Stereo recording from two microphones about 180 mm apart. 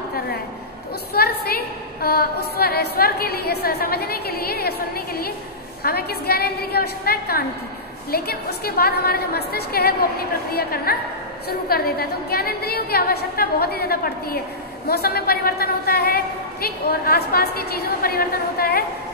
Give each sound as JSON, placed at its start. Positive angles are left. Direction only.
{"t": 1.1, "sound": "a woman's voice", "side_deg": 60}